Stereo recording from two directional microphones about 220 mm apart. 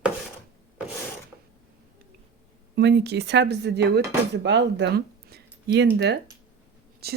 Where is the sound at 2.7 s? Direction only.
50° right (ahead or behind).